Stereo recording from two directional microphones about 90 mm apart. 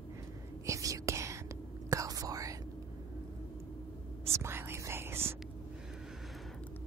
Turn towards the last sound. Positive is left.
turn(degrees=-25)  # may be behind; listen again after turning